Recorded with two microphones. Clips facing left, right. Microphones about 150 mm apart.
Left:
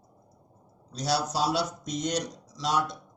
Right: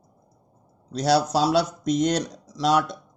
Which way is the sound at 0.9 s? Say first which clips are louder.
Right 8 dB; 70° right (ahead or behind).